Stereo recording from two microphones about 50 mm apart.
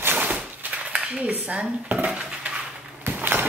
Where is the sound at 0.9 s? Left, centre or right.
Right.